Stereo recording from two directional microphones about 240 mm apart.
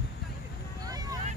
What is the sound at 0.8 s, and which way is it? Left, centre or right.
Vehicle, centre.